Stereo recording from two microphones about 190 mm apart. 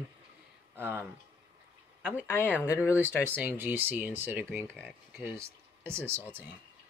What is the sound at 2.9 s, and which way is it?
Speech, 10° right (ahead or behind).